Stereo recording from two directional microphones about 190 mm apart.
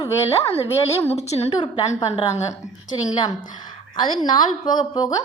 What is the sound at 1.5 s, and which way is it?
Speech, 20° left (ahead or behind).